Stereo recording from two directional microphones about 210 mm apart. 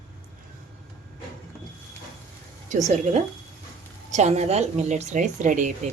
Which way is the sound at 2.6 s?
35° right (ahead or behind).